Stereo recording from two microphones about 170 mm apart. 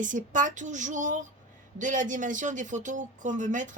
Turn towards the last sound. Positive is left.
turn(degrees=-50)  # may be behind; listen again after turning